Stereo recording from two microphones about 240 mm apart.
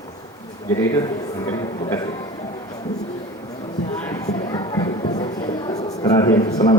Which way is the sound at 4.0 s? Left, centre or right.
Centre.